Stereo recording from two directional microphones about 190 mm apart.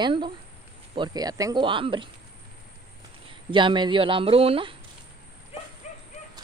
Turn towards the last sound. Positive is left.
turn(degrees=35)  # may be behind; listen again after turning